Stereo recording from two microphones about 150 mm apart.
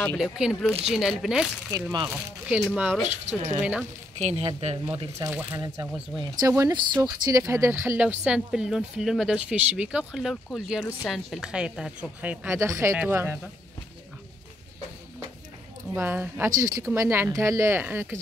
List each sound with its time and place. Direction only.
0.2 s a woman's voice: 5° right (ahead or behind)
1.7 s speech: 25° right (ahead or behind)
2.0 s speech: 5° right (ahead or behind)
3.1 s speech: 50° right (ahead or behind)
5.3 s speech: 10° right (ahead or behind)
6.4 s speech: 20° right (ahead or behind)
15.9 s speech: 15° right (ahead or behind)